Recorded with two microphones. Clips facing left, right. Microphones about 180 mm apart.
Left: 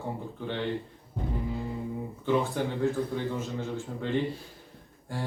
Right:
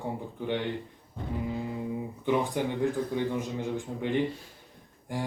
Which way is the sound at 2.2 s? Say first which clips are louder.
Even; 15° right (ahead or behind).